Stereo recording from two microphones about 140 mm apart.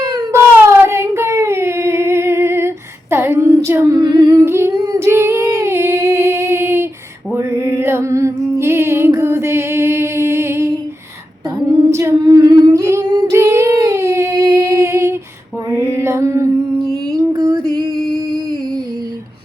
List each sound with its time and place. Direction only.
0.0 s a sound: 20° right (ahead or behind)
7.3 s music: 20° right (ahead or behind)
11.9 s singing: 20° right (ahead or behind)
16.0 s music: 20° right (ahead or behind)